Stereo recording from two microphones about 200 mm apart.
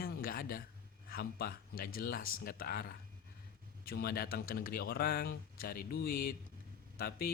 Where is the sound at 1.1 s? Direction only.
50° left (ahead or behind).